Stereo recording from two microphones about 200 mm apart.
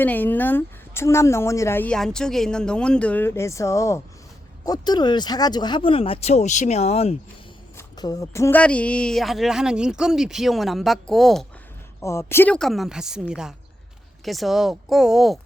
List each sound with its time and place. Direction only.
0.0 s a woman's voice: 10° left (ahead or behind); by 7.2 s 30° left (ahead or behind)
7.8 s speech: 20° left (ahead or behind); by 11.4 s centre (ahead or behind)
12.0 s speech: 10° left (ahead or behind); by 13.2 s 5° right (ahead or behind)
14.3 s speech: centre (ahead or behind)